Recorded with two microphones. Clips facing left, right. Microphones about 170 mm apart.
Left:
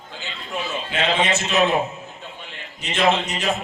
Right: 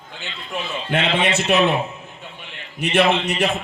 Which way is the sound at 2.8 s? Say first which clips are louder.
Right 3 dB; 60° right (ahead or behind).